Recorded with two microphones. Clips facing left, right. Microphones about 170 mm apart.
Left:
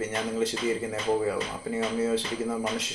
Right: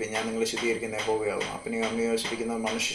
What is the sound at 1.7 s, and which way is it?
Speech, 5° right (ahead or behind).